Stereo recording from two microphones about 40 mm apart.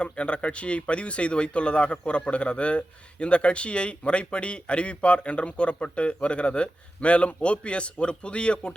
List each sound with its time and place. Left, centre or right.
0.0 s speech: left